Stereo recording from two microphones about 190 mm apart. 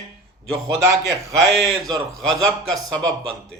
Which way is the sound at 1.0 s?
Centre (ahead or behind).